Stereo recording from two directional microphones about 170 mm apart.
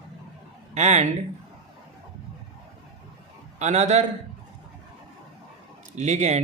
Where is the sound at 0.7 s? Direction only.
40° right (ahead or behind).